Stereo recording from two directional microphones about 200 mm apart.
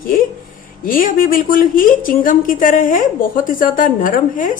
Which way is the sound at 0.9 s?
45° left (ahead or behind).